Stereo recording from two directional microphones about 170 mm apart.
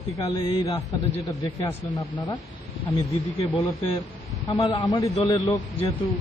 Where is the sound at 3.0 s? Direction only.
35° left (ahead or behind).